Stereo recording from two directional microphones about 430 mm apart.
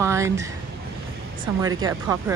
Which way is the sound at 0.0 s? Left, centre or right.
Centre.